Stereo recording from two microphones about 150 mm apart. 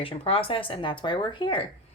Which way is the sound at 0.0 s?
40° left (ahead or behind).